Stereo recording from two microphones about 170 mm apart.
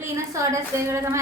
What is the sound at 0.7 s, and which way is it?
Speech, 15° right (ahead or behind).